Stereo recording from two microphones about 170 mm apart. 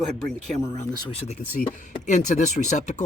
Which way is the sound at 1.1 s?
35° left (ahead or behind).